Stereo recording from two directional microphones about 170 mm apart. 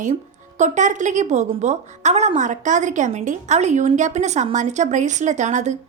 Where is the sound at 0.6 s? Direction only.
45° right (ahead or behind).